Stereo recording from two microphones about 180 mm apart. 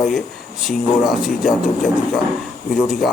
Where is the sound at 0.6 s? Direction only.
Centre (ahead or behind).